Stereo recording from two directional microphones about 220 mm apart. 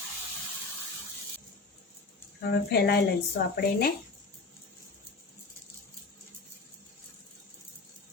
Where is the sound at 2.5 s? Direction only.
45° left (ahead or behind).